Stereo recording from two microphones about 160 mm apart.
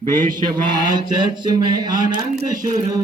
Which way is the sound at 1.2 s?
25° right (ahead or behind).